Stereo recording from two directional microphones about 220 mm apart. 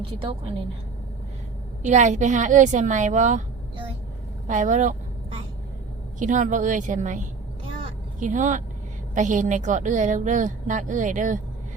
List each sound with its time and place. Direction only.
0.0 s a woman's voice: 25° right (ahead or behind)
1.8 s a woman's voice: 35° right (ahead or behind)
6.1 s a woman's voice: 35° right (ahead or behind)